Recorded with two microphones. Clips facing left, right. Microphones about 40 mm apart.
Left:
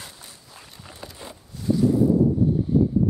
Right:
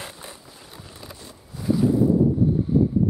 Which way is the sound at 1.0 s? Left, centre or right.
Centre.